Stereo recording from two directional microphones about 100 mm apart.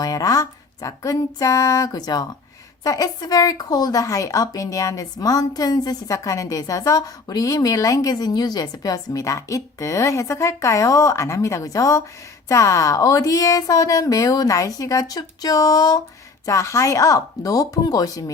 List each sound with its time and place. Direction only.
0.0 s a woman's voice: 35° left (ahead or behind)